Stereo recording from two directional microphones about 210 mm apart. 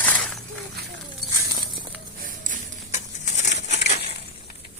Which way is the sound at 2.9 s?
35° left (ahead or behind).